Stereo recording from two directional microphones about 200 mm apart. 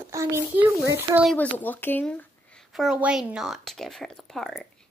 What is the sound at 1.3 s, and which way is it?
Speech, 10° left (ahead or behind).